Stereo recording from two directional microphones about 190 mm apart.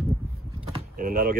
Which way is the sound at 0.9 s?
45° right (ahead or behind).